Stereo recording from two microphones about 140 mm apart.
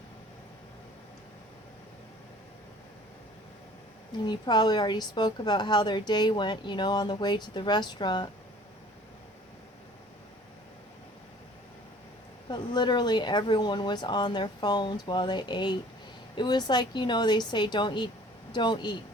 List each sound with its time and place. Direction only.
4.3 s a woman's voice: 30° left (ahead or behind)
12.5 s a woman's voice: 30° left (ahead or behind)